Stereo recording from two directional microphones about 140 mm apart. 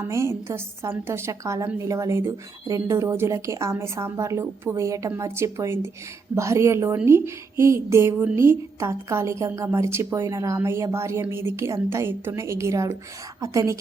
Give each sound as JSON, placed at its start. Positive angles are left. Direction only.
{"t": 0.0, "sound": "a woman's voice", "side_deg": -20}